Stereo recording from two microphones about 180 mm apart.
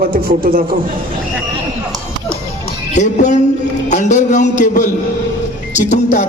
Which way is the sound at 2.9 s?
40° left (ahead or behind).